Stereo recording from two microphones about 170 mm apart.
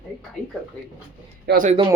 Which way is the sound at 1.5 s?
75° right (ahead or behind).